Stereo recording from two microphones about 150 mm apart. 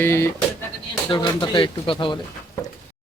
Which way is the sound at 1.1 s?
30° left (ahead or behind).